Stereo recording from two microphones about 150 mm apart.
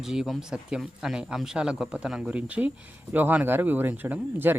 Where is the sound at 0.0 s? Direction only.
5° right (ahead or behind).